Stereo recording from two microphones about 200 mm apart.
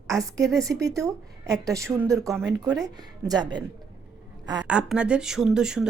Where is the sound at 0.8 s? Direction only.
15° right (ahead or behind).